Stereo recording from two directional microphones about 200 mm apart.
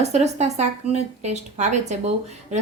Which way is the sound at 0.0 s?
35° right (ahead or behind).